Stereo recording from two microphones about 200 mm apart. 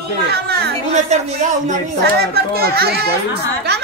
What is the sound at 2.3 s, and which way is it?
Speech, 50° right (ahead or behind).